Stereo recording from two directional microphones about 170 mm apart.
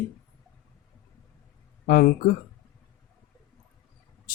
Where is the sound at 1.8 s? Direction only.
60° left (ahead or behind).